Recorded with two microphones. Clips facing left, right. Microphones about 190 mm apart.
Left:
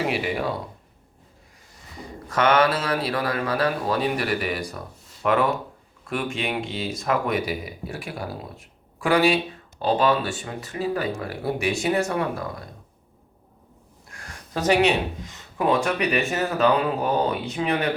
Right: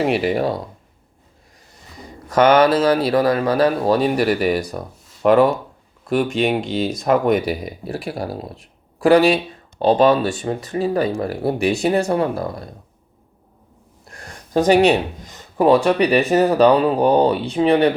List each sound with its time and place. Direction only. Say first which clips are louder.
0.1 s speech: right 7 dB; 40° right (ahead or behind)
2.3 s speech: right 7 dB; 40° right (ahead or behind)
14.1 s speech: right 10 dB; 35° right (ahead or behind)